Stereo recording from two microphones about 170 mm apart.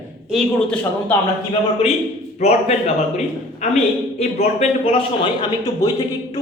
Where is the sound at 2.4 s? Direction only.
40° left (ahead or behind).